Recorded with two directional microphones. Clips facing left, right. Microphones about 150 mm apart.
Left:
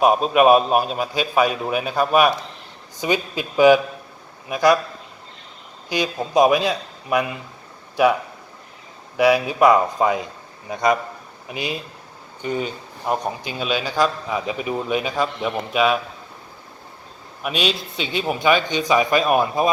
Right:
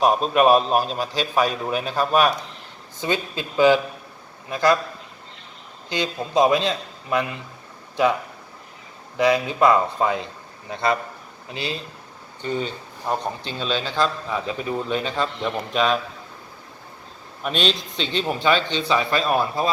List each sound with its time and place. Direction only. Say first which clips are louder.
0.0 s speech: left 2 dB; 10° left (ahead or behind)
5.9 s speech: left 2 dB; 15° left (ahead or behind)
9.1 s speech: left 3 dB; 15° left (ahead or behind)
17.4 s speech: even; 5° left (ahead or behind)